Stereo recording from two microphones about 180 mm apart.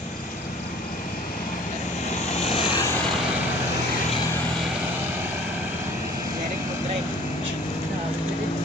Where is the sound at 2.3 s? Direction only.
35° left (ahead or behind).